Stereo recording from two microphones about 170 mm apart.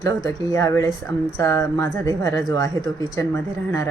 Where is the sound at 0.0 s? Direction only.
20° left (ahead or behind).